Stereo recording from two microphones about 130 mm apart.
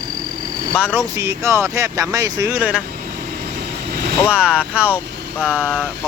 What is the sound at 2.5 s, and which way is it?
Speech, 10° right (ahead or behind).